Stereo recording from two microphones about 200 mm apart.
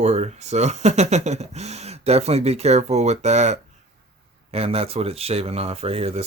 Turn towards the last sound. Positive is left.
turn(degrees=-30)  # may be behind; listen again after turning